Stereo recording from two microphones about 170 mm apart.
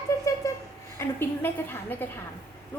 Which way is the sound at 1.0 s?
15° left (ahead or behind).